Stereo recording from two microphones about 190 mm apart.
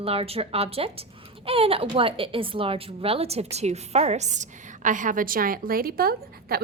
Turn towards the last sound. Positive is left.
turn(degrees=-50)  # may be behind; listen again after turning